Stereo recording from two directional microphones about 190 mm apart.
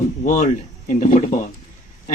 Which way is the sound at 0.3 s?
40° left (ahead or behind).